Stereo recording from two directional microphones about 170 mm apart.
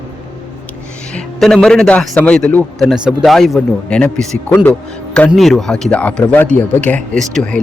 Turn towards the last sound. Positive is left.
turn(degrees=5)  # may be behind; listen again after turning